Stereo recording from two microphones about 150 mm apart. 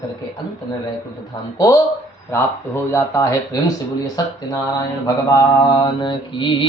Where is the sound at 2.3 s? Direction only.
15° left (ahead or behind); by 6.7 s 30° left (ahead or behind).